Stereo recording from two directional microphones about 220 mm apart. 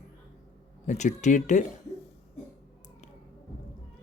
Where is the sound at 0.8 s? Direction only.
30° left (ahead or behind).